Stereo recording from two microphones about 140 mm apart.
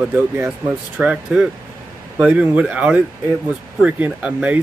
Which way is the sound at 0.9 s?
10° right (ahead or behind).